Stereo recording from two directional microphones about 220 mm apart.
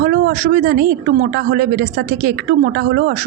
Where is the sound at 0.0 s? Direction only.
40° right (ahead or behind).